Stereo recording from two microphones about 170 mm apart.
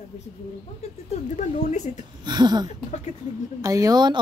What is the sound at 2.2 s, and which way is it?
A woman's voice, 25° right (ahead or behind).